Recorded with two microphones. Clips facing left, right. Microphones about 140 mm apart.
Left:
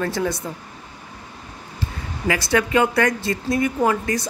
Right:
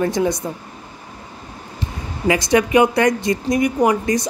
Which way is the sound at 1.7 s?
20° right (ahead or behind).